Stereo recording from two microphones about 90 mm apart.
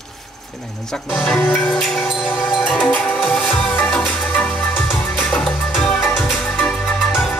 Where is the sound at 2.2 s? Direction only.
20° left (ahead or behind).